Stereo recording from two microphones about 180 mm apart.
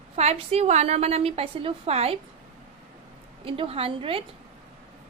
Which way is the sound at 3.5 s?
30° right (ahead or behind).